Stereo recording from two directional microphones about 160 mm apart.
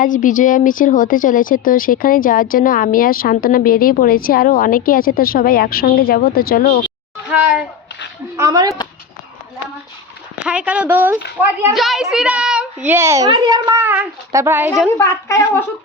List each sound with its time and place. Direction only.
0.0 s a woman's voice: 55° left (ahead or behind)
6.8 s a sound: 5° right (ahead or behind)
8.4 s speech: 20° right (ahead or behind)
10.3 s a child's voice: 5° right (ahead or behind)
11.7 s a child's voice: centre (ahead or behind); by 13.8 s 25° right (ahead or behind)
13.8 s a child's voice: 10° right (ahead or behind)
14.9 s speech: 15° left (ahead or behind)